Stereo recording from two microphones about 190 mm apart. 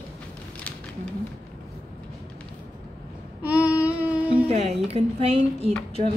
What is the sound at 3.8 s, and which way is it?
Music, 5° right (ahead or behind).